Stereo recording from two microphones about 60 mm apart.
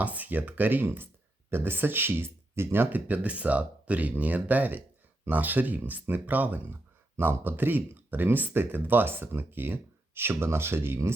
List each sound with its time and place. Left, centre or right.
0.0 s speech: right